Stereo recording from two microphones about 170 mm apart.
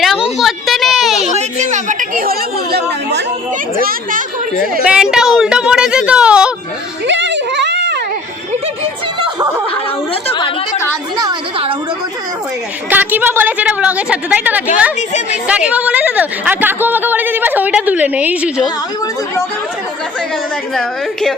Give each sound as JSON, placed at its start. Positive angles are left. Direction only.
{"t": 0.0, "sound": "a sound", "side_deg": 0}
{"t": 1.2, "sound": "a sound", "side_deg": -40}
{"t": 2.7, "sound": "chatter", "side_deg": -85}
{"t": 4.8, "sound": "speech", "side_deg": -5}
{"t": 7.1, "sound": "a sound", "side_deg": -90}
{"t": 10.2, "sound": "a woman's voice", "side_deg": 30}
{"t": 11.2, "sound": "a woman's voice", "side_deg": -25}
{"t": 12.9, "sound": "a woman's voice", "side_deg": -10}
{"t": 20.7, "sound": "speech", "side_deg": 5}